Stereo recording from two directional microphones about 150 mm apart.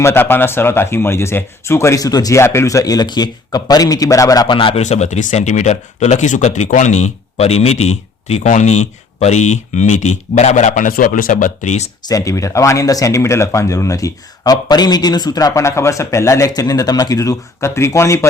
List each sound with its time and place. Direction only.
0.0 s speech: 15° left (ahead or behind); by 4.8 s 35° left (ahead or behind)
4.8 s speech: 50° left (ahead or behind)
12.0 s speech: 20° left (ahead or behind)